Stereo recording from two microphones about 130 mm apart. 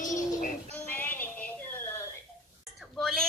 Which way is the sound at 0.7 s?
15° left (ahead or behind).